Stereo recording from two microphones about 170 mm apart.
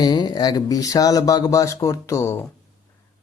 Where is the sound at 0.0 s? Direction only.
25° left (ahead or behind).